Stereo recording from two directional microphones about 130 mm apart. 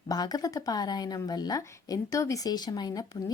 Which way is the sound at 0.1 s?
30° left (ahead or behind).